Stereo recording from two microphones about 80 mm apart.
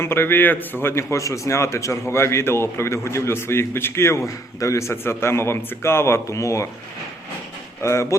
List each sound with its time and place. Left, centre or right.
0.0 s a man's voice: left
1.1 s a man's voice: left
7.8 s speech: left